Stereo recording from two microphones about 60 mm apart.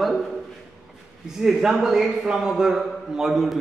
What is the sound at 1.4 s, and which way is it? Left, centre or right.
A man's voice, centre.